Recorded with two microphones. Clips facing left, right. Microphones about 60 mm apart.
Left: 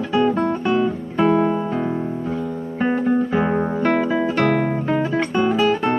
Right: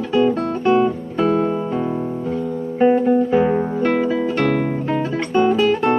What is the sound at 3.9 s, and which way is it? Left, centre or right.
Music, centre.